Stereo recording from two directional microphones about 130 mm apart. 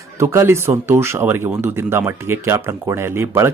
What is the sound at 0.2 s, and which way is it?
Speech, 20° right (ahead or behind).